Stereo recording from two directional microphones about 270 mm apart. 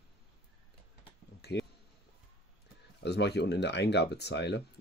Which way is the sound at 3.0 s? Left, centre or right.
Left.